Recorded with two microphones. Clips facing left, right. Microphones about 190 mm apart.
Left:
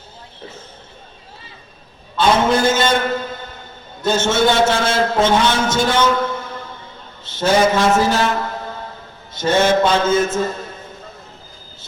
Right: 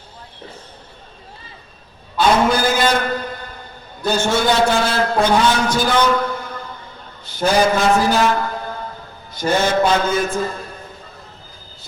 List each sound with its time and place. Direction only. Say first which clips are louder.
2.1 s a man's voice: even; 25° left (ahead or behind)